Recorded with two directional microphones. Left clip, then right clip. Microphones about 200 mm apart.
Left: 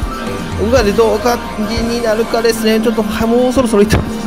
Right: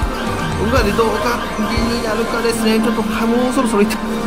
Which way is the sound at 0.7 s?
15° left (ahead or behind).